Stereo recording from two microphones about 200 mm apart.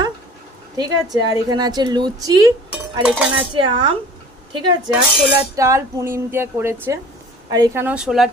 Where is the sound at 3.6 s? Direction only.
25° right (ahead or behind).